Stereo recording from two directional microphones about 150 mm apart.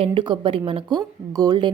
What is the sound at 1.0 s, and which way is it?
Speech, 25° right (ahead or behind).